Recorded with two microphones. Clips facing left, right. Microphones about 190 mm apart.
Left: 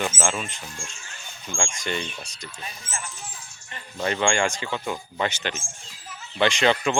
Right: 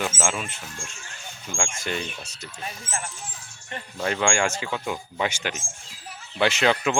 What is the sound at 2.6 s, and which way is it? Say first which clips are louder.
Speech: right 4 dB; 50° right (ahead or behind).